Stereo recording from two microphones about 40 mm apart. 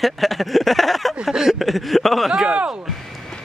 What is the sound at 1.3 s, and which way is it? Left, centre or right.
Speech, centre.